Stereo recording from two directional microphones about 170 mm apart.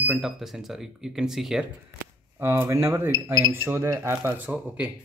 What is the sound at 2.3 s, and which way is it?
Speech, 15° right (ahead or behind).